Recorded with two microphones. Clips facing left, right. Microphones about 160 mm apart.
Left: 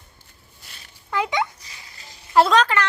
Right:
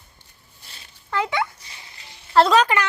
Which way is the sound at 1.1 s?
15° left (ahead or behind).